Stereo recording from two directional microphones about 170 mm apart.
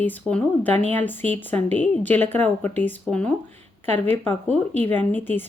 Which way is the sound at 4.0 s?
10° left (ahead or behind).